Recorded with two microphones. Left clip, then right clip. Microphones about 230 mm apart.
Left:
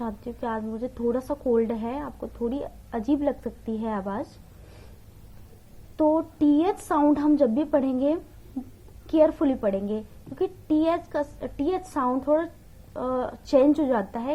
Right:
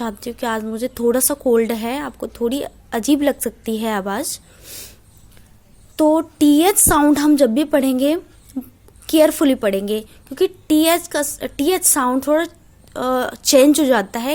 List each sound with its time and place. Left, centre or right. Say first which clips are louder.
0.0 s a woman's voice: right 8 dB; right
6.0 s a woman's voice: right 7 dB; right